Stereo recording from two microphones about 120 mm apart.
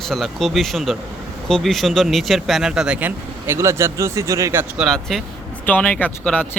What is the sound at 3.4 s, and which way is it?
Speech, 20° right (ahead or behind).